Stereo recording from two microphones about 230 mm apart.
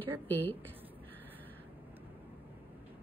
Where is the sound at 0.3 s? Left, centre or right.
Centre.